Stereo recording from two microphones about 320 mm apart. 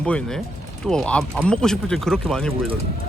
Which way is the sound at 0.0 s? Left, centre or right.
Centre.